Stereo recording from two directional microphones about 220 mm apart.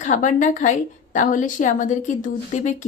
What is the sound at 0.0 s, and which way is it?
A woman's voice, 35° left (ahead or behind).